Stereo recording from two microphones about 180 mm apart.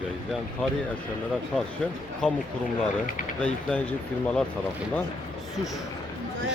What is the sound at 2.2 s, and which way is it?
Speech, 5° left (ahead or behind).